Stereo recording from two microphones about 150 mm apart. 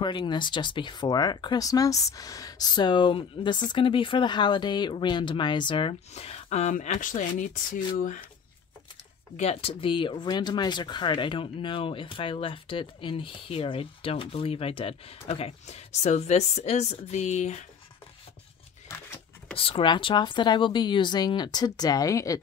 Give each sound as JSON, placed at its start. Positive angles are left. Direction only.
{"t": 0.0, "sound": "speech", "side_deg": 30}
{"t": 9.4, "sound": "speech", "side_deg": 40}
{"t": 18.9, "sound": "a sound", "side_deg": 20}
{"t": 19.5, "sound": "speech", "side_deg": 40}